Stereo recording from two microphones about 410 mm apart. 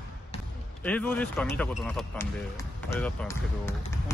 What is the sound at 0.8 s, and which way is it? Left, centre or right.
Speech, centre.